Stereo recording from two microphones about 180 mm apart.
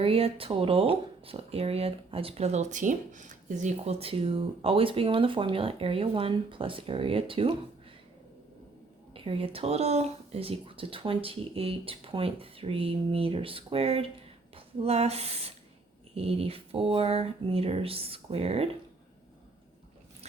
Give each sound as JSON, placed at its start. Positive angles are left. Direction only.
{"t": 0.0, "sound": "speech", "side_deg": -30}
{"t": 9.1, "sound": "speech", "side_deg": -30}